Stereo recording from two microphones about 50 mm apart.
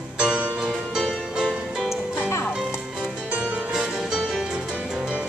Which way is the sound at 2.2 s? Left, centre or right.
Left.